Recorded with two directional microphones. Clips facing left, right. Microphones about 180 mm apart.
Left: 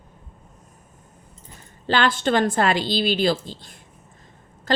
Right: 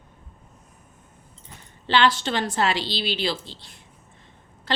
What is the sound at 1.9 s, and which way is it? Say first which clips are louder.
A woman's voice: left 1 dB; 50° left (ahead or behind).